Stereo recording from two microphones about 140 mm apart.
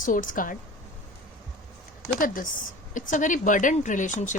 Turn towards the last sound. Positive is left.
turn(degrees=65)  # may be behind; listen again after turning